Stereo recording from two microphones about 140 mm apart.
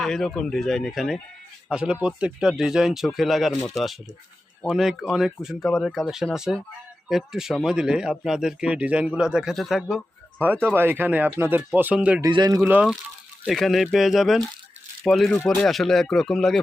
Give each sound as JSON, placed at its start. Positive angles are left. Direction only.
{"t": 0.0, "sound": "speech", "side_deg": 5}
{"t": 10.4, "sound": "speech", "side_deg": -15}
{"t": 12.2, "sound": "speech", "side_deg": -30}
{"t": 12.6, "sound": "speech", "side_deg": -5}